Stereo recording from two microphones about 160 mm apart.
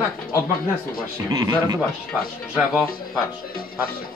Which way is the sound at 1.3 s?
20° right (ahead or behind).